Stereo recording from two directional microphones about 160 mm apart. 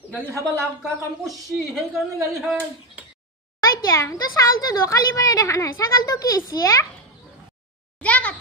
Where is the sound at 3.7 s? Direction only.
20° left (ahead or behind).